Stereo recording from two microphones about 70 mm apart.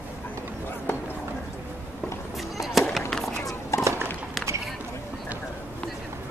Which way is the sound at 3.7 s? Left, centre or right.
Left.